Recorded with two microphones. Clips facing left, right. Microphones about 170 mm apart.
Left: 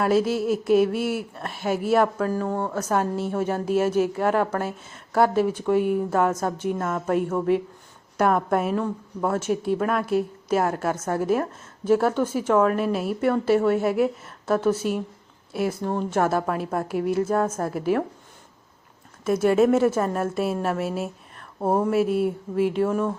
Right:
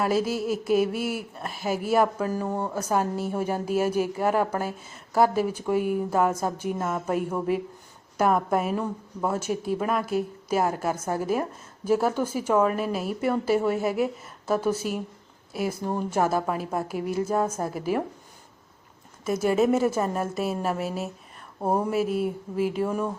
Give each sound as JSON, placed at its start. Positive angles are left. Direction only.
{"t": 0.0, "sound": "speech", "side_deg": 0}
{"t": 17.0, "sound": "a woman's voice", "side_deg": 50}
{"t": 17.3, "sound": "speech", "side_deg": -5}
{"t": 19.3, "sound": "speech", "side_deg": 0}